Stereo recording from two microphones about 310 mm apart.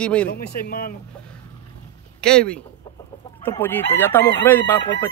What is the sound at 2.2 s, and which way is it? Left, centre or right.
Speech, centre.